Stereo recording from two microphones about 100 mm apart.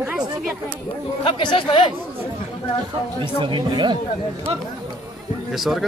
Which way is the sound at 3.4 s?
55° right (ahead or behind).